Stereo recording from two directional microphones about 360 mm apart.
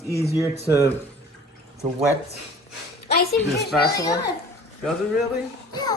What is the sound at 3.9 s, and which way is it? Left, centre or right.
Speech, centre.